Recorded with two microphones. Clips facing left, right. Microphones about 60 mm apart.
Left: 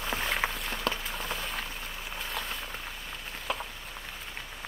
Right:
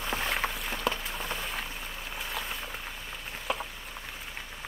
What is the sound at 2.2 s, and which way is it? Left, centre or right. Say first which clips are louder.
Boat: even; centre.